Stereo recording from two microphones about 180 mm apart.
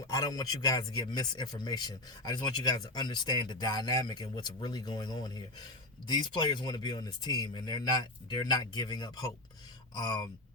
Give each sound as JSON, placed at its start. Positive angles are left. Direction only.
{"t": 0.1, "sound": "a man's voice", "side_deg": 20}